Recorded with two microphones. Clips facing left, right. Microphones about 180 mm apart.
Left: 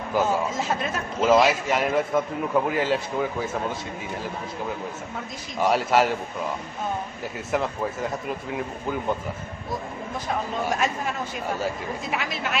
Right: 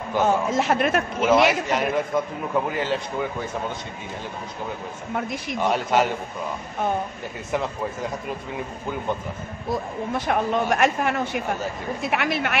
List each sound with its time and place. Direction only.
0.2 s a man's voice: 65° right (ahead or behind)
1.7 s speech: 5° left (ahead or behind)
5.1 s speech: 65° right (ahead or behind)
5.6 s speech: 5° left (ahead or behind)
7.5 s speech: centre (ahead or behind)
10.1 s a man's voice: 70° right (ahead or behind)